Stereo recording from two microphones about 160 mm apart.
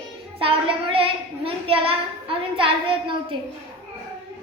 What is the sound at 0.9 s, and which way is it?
Child singing, 35° right (ahead or behind).